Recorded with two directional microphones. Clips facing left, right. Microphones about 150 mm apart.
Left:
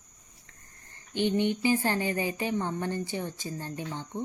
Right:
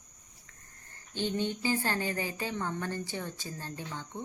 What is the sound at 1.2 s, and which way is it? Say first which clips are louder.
Speech: left 6 dB; 15° left (ahead or behind).